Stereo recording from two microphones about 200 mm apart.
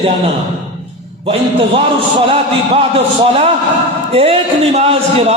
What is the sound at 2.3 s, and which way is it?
A man's voice, 30° right (ahead or behind).